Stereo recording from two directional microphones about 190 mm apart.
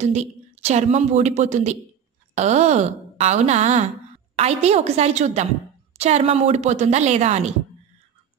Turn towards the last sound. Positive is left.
turn(degrees=-35)  # may be behind; listen again after turning